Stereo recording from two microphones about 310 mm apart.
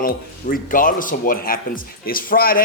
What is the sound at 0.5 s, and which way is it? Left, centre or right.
Speech, left.